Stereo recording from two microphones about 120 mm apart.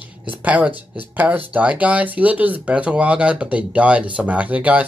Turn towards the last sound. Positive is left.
turn(degrees=-10)  # may be behind; listen again after turning